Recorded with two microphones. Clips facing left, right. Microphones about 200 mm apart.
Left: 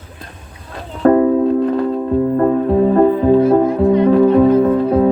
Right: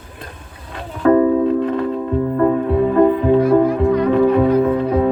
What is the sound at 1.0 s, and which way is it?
Music, 35° left (ahead or behind).